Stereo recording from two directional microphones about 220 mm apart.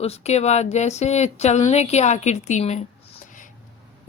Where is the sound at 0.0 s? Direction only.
30° left (ahead or behind).